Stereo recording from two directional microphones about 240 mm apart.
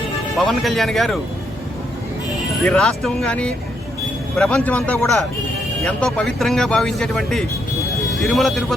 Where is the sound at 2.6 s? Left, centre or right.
Centre.